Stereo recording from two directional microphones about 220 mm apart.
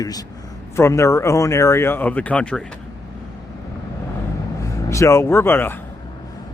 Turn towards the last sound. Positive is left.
turn(degrees=10)  # may be behind; listen again after turning